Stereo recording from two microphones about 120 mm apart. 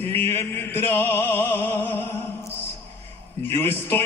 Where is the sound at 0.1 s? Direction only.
55° right (ahead or behind).